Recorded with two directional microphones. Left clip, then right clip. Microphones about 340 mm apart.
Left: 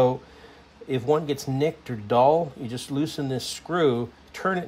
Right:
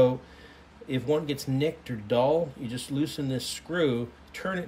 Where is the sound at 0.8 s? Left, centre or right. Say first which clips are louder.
Left 4 dB; centre.